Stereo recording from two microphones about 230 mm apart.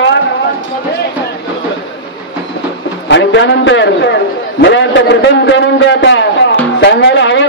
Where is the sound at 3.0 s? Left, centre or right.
Left.